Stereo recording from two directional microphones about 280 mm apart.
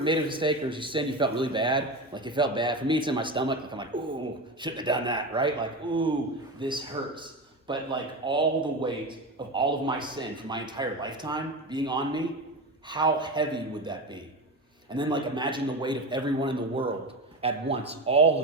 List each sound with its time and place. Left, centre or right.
0.0 s speech: centre